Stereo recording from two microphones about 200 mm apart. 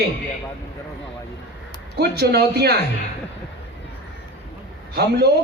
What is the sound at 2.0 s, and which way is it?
Speech, 55° right (ahead or behind).